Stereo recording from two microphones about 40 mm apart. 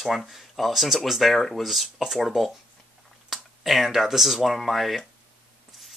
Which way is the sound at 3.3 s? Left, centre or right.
Centre.